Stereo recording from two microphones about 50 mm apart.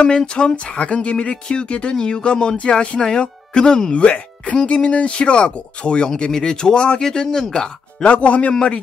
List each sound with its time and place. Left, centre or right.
0.0 s speech: centre
8.1 s speech: left